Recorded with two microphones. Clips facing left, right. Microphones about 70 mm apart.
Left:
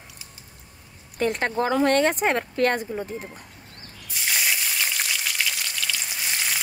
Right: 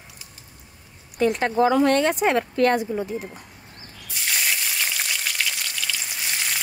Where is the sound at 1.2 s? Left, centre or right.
Left.